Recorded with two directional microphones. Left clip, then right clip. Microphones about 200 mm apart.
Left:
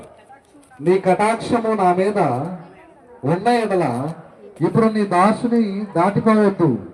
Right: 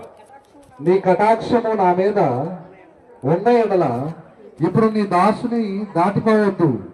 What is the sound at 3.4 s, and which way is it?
A man's voice, 20° right (ahead or behind).